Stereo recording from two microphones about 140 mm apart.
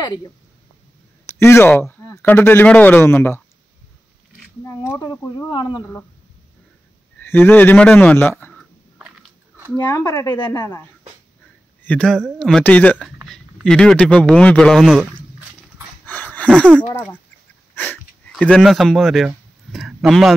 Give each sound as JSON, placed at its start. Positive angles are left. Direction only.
{"t": 1.3, "sound": "speech", "side_deg": 15}
{"t": 4.6, "sound": "a sound", "side_deg": 20}
{"t": 5.5, "sound": "speech", "side_deg": 30}
{"t": 7.2, "sound": "speech", "side_deg": 15}
{"t": 8.9, "sound": "biting", "side_deg": -5}
{"t": 9.8, "sound": "speech", "side_deg": 25}
{"t": 11.8, "sound": "speech", "side_deg": 10}
{"t": 16.1, "sound": "a sound", "side_deg": 10}
{"t": 16.9, "sound": "speech", "side_deg": 10}
{"t": 17.7, "sound": "wheeze", "side_deg": 15}
{"t": 18.3, "sound": "speech", "side_deg": 5}